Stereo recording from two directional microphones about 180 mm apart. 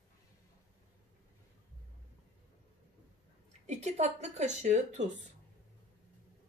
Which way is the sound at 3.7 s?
40° right (ahead or behind).